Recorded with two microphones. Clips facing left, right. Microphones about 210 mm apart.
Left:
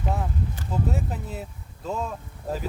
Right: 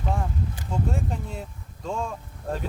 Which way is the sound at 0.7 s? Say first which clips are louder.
Even; 5° left (ahead or behind).